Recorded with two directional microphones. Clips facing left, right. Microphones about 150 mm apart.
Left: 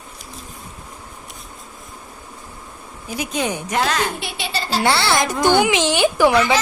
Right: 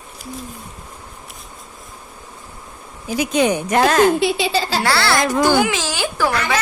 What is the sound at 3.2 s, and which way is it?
Speech, 80° right.